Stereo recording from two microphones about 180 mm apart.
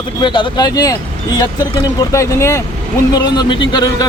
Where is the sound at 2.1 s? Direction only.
15° left (ahead or behind).